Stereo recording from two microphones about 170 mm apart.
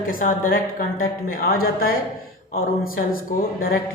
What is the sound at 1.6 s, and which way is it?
Speech, 60° left (ahead or behind).